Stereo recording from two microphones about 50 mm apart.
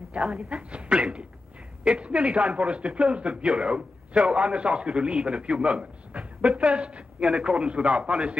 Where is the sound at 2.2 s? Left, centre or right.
Centre.